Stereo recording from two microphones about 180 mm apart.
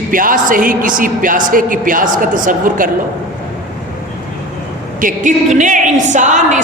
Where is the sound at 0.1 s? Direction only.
50° right (ahead or behind).